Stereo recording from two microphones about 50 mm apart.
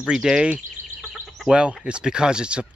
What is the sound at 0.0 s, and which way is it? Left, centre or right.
Speech, centre.